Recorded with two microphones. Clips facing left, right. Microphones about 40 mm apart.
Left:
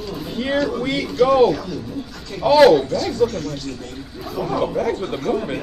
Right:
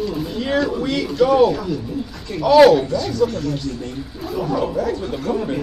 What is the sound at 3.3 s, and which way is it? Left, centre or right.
Speech, right.